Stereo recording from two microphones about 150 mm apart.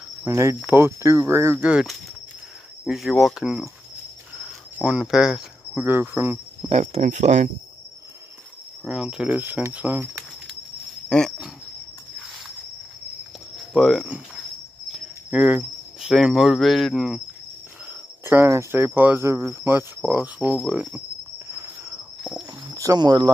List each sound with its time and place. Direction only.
0.2 s cricket: 20° right (ahead or behind); by 3.7 s 5° right (ahead or behind)
4.8 s cricket: 5° right (ahead or behind)
6.7 s speech: 50° right (ahead or behind)
8.8 s cricket: 5° right (ahead or behind)
11.1 s speech: 5° left (ahead or behind)
13.7 s speech: 5° right (ahead or behind)
18.2 s cricket: 15° right (ahead or behind)
20.0 s cricket: 5° right (ahead or behind)
22.8 s speech: 25° right (ahead or behind)